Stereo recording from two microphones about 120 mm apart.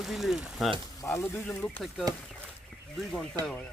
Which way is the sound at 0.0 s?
Centre (ahead or behind).